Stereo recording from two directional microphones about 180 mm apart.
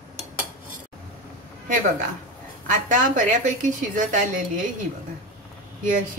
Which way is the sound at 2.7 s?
45° right (ahead or behind).